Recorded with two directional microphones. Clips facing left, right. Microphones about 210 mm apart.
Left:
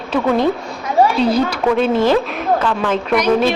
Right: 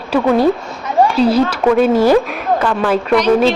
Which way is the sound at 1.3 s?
5° right (ahead or behind).